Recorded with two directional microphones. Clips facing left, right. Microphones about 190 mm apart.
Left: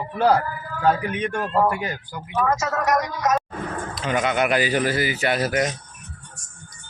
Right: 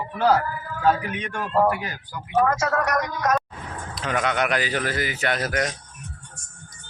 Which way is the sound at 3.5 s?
55° left (ahead or behind).